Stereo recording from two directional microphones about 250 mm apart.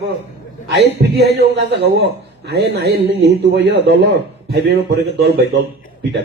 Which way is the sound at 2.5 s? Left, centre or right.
Right.